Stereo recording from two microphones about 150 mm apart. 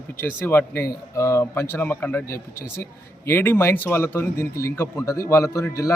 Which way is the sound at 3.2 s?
15° left (ahead or behind).